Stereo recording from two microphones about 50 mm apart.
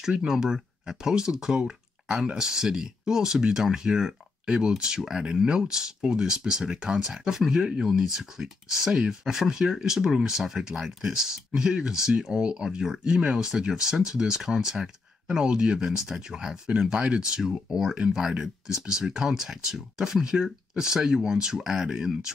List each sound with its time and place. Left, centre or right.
0.3 s speech: centre